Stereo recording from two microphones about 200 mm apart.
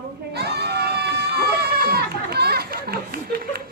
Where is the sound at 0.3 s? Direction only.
55° right (ahead or behind).